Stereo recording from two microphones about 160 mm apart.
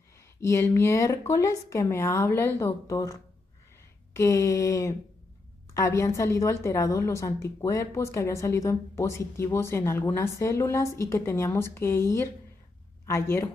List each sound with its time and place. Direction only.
0.4 s a woman's voice: 15° left (ahead or behind)
4.1 s a sound: 20° left (ahead or behind)
5.8 s a woman's voice: 20° left (ahead or behind)